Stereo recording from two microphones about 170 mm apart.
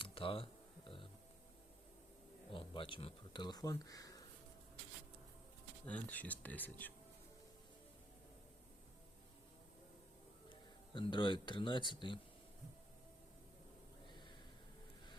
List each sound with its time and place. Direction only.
0.0 s a sound: 30° left (ahead or behind)
2.5 s speech: 30° left (ahead or behind)
5.8 s speech: 10° left (ahead or behind)
10.5 s speech: 30° left (ahead or behind)
14.1 s gasp: 25° left (ahead or behind)